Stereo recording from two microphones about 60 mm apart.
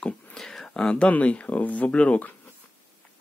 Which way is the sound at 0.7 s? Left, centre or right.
Centre.